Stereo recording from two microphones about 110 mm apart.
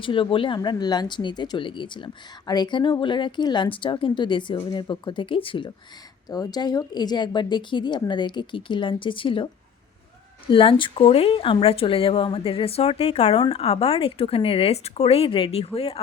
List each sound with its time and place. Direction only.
0.0 s speech: 50° left (ahead or behind)
6.3 s speech: 35° left (ahead or behind); by 16.0 s 65° left (ahead or behind)